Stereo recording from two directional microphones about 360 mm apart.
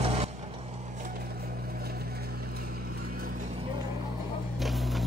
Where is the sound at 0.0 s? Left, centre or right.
Centre.